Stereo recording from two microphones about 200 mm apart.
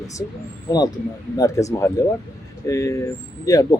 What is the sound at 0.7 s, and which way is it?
Speech, 15° left (ahead or behind).